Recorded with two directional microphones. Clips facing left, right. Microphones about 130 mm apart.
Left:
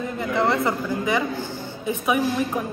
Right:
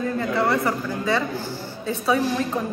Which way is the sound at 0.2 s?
20° left (ahead or behind).